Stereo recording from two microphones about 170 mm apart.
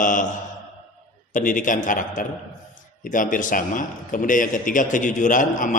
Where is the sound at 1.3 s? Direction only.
50° left (ahead or behind).